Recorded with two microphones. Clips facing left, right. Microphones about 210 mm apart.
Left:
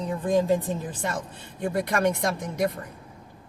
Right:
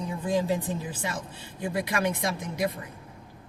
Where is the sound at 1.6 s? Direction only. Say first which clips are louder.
Left 4 dB; 50° left (ahead or behind).